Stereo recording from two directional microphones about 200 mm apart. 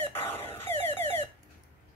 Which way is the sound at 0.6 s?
10° left (ahead or behind).